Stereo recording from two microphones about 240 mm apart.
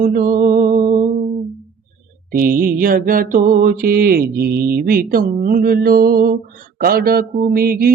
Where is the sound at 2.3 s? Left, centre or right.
Right.